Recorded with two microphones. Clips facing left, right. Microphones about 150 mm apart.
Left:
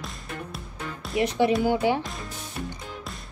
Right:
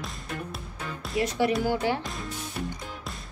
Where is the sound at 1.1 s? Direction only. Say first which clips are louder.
Left 3 dB; 20° left (ahead or behind).